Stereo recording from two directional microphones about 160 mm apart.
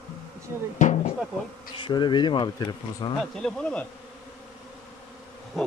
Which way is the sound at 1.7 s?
30° left (ahead or behind).